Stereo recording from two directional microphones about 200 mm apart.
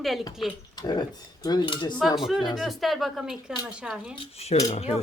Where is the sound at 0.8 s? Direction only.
20° left (ahead or behind).